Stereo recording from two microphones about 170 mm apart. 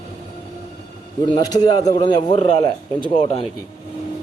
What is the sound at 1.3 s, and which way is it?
A man's voice, 25° left (ahead or behind).